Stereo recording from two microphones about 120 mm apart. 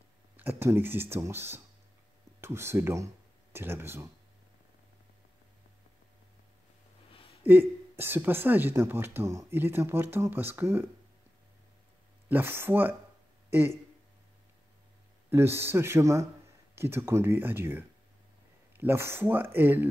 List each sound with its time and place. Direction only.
0.4 s speech: 20° right (ahead or behind)
7.1 s a sound: 50° left (ahead or behind)
7.4 s speech: 15° right (ahead or behind)
12.3 s speech: 15° right (ahead or behind)
15.2 s speech: 20° right (ahead or behind)